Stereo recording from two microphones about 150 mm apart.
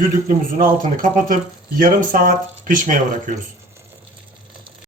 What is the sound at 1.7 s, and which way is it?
Speech, 60° right (ahead or behind).